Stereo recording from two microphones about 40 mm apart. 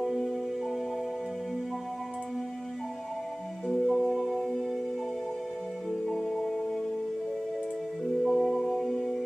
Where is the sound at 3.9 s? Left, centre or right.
Centre.